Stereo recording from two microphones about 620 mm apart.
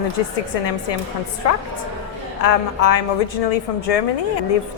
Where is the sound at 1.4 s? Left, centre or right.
Left.